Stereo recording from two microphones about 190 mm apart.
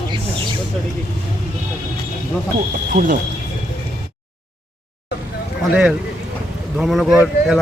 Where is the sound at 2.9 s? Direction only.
45° right (ahead or behind).